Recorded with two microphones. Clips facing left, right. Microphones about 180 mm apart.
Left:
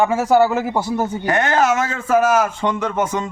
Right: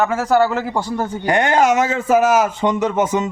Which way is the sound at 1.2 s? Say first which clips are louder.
Right 3 dB; 15° right (ahead or behind).